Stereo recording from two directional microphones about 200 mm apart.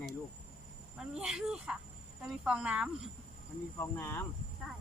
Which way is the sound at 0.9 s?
5° right (ahead or behind).